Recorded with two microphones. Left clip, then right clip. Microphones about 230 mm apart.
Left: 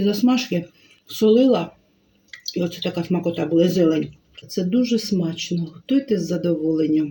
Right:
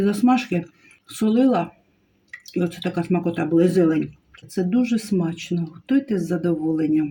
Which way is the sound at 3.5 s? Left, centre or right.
Centre.